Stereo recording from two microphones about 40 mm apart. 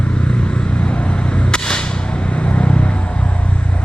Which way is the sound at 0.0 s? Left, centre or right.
Left.